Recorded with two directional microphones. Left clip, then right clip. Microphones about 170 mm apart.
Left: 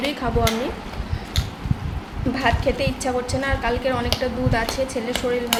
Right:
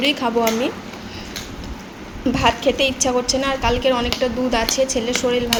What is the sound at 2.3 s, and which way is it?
A woman's voice, 25° right (ahead or behind).